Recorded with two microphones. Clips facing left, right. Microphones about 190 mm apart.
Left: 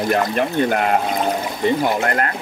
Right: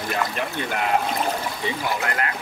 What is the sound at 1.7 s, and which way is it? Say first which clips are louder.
Speech: left 9 dB; 45° left (ahead or behind).